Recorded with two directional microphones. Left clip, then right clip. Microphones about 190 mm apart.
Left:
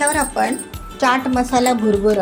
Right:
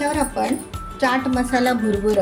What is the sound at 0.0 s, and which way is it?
Music, 10° left (ahead or behind).